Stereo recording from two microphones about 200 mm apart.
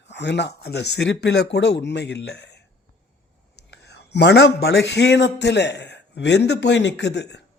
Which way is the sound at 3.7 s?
60° left (ahead or behind).